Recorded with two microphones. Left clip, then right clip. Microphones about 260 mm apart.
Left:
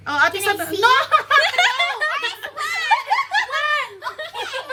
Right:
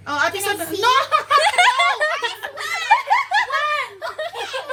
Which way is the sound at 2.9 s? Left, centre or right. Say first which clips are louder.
Right 3 dB; centre.